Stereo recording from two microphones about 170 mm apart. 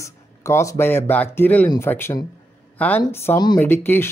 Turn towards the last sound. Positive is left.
turn(degrees=15)  # may be behind; listen again after turning